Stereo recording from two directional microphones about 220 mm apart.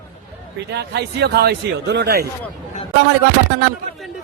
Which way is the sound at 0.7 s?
50° right (ahead or behind).